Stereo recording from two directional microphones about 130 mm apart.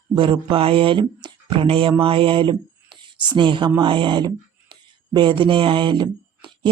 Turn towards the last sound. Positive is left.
turn(degrees=-40)  # may be behind; listen again after turning